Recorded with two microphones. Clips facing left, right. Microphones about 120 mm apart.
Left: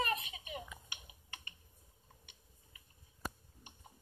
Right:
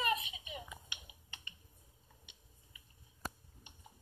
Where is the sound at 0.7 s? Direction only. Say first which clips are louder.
Right 1 dB; 20° right (ahead or behind).